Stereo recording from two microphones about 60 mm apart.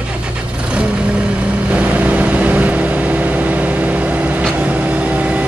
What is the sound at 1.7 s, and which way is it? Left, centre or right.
Vehicle, right.